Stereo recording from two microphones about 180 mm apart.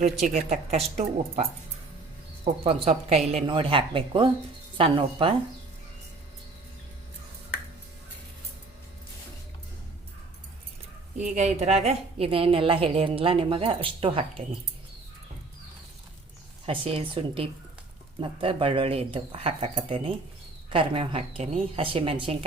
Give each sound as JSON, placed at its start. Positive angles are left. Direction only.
{"t": 0.0, "sound": "a woman's voice", "side_deg": -40}
{"t": 2.4, "sound": "a woman's voice", "side_deg": -35}
{"t": 11.2, "sound": "a woman's voice", "side_deg": -40}
{"t": 16.6, "sound": "a woman's voice", "side_deg": -30}